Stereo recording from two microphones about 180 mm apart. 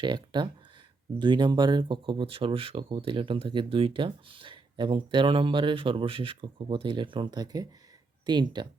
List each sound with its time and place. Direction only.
0.0 s speech: 25° right (ahead or behind)